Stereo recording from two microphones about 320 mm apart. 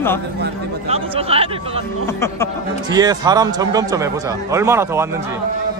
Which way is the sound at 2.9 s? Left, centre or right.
Centre.